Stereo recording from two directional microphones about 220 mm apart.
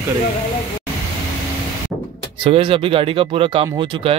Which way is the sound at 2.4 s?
25° right (ahead or behind).